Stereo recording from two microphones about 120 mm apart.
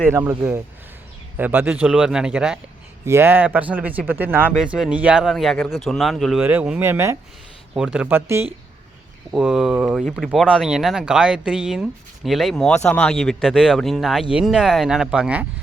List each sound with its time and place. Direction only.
0.1 s speech: 20° right (ahead or behind)
3.1 s speech: 20° right (ahead or behind)
4.5 s speech: 5° right (ahead or behind)
6.4 s speech: 10° right (ahead or behind)
7.7 s speech: 10° right (ahead or behind)
9.3 s speech: 5° right (ahead or behind)